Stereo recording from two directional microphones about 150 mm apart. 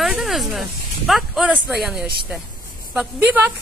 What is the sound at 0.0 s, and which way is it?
A woman's voice, centre (ahead or behind).